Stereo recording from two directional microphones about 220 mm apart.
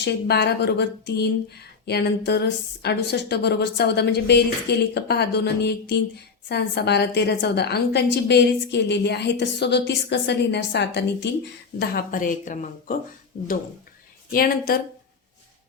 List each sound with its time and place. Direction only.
0.0 s a woman's voice: 50° left (ahead or behind)
14.3 s a woman's voice: 40° left (ahead or behind)